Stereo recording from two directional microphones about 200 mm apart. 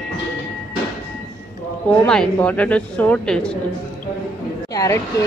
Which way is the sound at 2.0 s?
5° left (ahead or behind).